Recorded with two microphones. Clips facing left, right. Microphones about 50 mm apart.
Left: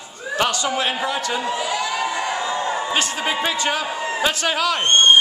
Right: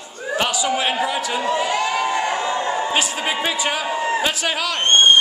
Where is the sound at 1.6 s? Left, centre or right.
Right.